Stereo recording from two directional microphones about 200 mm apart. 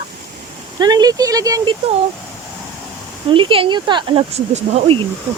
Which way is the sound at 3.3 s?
25° right (ahead or behind).